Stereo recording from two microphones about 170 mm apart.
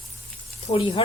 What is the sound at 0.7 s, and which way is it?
Speech, 30° left (ahead or behind).